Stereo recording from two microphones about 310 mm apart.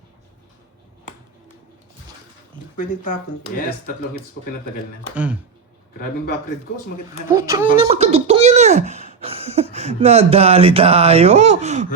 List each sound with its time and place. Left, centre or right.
2.7 s speech: left
5.1 s speech: centre
7.3 s speech: centre